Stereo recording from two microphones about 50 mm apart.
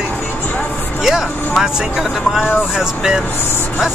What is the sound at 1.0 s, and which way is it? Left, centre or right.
Speech, centre.